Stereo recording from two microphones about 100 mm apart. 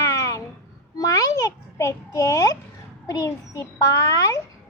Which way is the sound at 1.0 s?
35° left (ahead or behind).